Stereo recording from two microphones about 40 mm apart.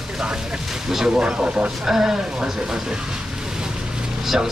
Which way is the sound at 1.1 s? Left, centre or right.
Right.